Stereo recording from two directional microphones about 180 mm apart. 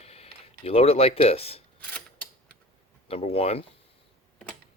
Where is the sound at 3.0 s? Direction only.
30° left (ahead or behind).